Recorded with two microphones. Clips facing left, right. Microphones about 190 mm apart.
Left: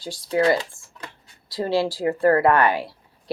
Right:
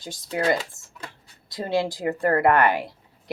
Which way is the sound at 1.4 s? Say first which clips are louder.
Left 2 dB; 20° right (ahead or behind).